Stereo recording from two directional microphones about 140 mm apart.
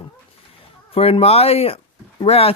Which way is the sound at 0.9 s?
45° left (ahead or behind).